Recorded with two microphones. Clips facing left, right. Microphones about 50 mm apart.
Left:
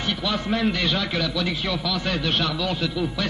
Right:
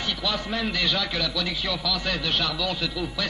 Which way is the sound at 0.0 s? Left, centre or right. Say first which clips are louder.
Left 2 dB; centre.